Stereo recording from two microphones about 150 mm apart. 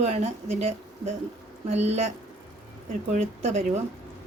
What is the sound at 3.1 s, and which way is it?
Speech, 50° right (ahead or behind).